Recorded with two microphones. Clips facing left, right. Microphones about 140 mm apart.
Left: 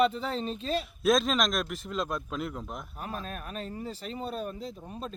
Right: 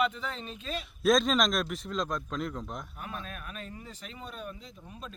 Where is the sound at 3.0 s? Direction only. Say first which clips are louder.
Left 3 dB; 35° left (ahead or behind).